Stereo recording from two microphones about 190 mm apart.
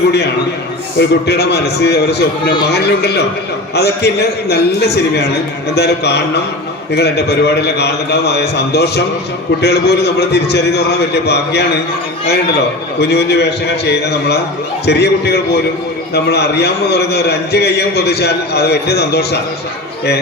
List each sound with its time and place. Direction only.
0.9 s a man's voice: 60° left (ahead or behind)
13.0 s a man's voice: 60° left (ahead or behind)